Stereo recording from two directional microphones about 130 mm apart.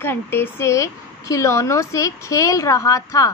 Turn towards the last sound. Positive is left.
turn(degrees=25)  # may be behind; listen again after turning